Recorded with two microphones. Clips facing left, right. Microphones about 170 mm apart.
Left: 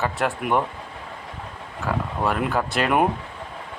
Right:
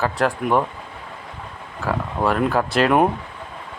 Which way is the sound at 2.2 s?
Centre (ahead or behind).